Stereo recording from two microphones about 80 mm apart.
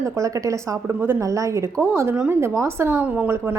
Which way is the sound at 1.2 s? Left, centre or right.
Right.